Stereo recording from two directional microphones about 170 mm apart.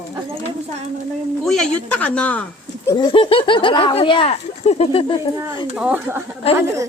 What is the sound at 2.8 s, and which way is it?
Speech, 25° left (ahead or behind).